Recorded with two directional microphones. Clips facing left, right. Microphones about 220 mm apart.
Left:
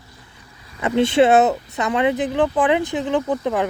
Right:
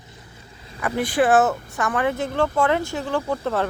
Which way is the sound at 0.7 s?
25° left (ahead or behind).